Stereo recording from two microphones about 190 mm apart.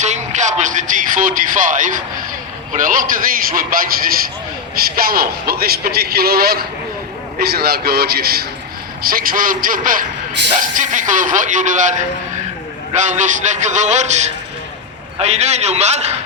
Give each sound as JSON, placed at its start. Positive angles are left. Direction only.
{"t": 0.0, "sound": "a man's voice", "side_deg": -40}